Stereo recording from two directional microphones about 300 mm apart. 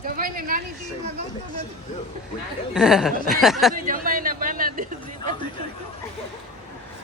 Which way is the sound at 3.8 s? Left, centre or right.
Right.